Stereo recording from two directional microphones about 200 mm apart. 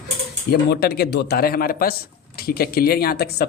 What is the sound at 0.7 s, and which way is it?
Speech, 55° left (ahead or behind).